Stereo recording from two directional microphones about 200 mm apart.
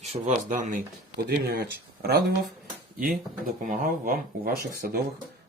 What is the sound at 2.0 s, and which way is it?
Speech, 35° right (ahead or behind).